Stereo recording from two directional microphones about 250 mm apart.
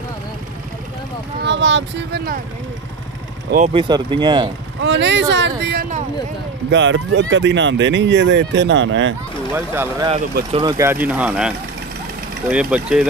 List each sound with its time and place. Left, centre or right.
1.4 s speech: right
3.7 s speech: centre
4.8 s speech: right
9.5 s speech: centre